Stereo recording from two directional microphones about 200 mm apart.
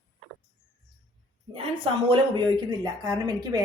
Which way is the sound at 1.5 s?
25° right (ahead or behind).